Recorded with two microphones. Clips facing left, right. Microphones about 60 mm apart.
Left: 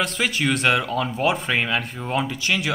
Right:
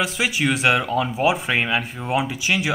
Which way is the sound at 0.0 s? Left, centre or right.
Centre.